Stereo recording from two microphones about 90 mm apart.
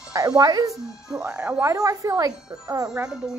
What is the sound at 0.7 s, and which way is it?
Speech, 5° right (ahead or behind).